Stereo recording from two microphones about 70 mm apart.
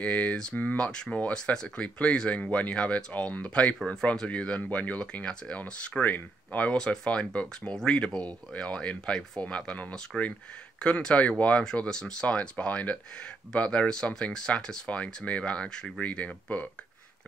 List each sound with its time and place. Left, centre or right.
0.0 s speech: centre